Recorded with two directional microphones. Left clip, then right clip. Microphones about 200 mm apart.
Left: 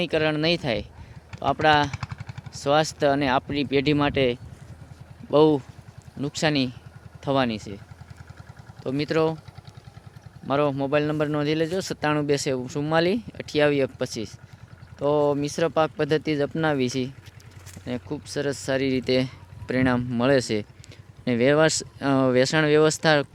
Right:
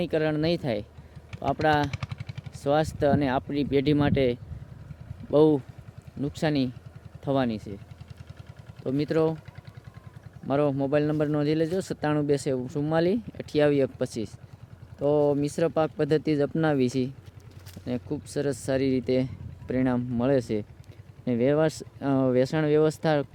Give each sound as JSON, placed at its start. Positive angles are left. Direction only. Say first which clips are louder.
{"t": 0.0, "sound": "speech", "louder": "left 3 dB", "side_deg": -10}
{"t": 1.9, "sound": "a sound", "louder": "left 3 dB", "side_deg": -70}
{"t": 2.5, "sound": "speech", "louder": "left 3 dB", "side_deg": -10}
{"t": 8.8, "sound": "speech", "louder": "left 2 dB", "side_deg": -15}
{"t": 10.4, "sound": "speech", "louder": "left 2 dB", "side_deg": -15}